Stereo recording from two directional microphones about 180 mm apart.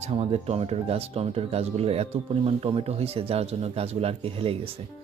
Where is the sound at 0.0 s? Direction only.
35° right (ahead or behind).